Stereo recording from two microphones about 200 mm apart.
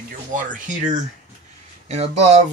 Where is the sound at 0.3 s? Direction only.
40° right (ahead or behind).